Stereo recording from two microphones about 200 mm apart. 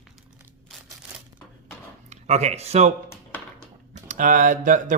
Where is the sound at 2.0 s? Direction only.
35° right (ahead or behind).